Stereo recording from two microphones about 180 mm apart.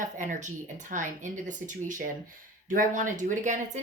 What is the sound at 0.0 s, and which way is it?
Speech, 45° right (ahead or behind).